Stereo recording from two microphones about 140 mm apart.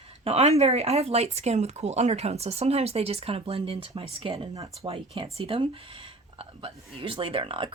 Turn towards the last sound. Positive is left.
turn(degrees=-40)  # may be behind; listen again after turning